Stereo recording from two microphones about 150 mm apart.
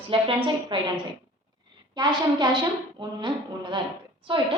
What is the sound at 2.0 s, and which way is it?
A woman's voice, 30° right (ahead or behind).